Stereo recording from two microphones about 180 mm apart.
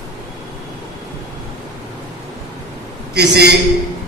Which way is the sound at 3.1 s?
65° right (ahead or behind).